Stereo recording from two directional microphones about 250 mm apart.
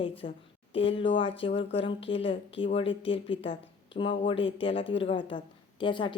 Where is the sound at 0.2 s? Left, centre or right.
Left.